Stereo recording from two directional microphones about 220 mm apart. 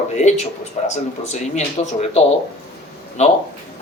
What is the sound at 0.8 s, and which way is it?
A man's voice, 30° left (ahead or behind).